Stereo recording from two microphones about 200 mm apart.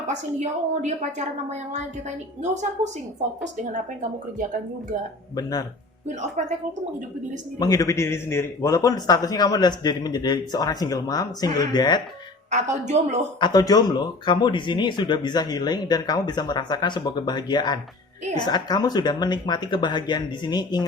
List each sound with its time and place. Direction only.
0.1 s a woman's voice: 35° right (ahead or behind)
5.4 s a man's voice: 20° left (ahead or behind)
7.6 s a man's voice: 15° left (ahead or behind)
12.5 s a woman's voice: 35° right (ahead or behind)
13.4 s a man's voice: 20° left (ahead or behind)